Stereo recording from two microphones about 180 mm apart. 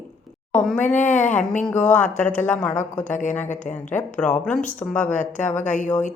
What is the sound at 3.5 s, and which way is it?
Speech, 40° left (ahead or behind).